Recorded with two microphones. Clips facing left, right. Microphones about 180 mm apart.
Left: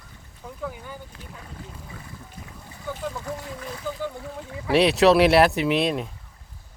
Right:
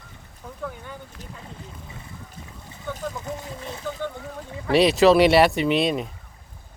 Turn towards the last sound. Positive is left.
turn(degrees=0)  # may be behind; listen again after turning